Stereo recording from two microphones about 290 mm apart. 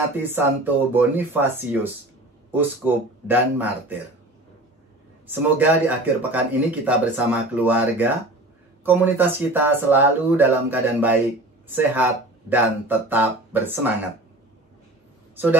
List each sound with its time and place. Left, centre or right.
0.2 s speech: centre
5.3 s speech: centre